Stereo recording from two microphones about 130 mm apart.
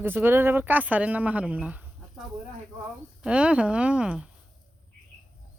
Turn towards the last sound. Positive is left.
turn(degrees=-10)  # may be behind; listen again after turning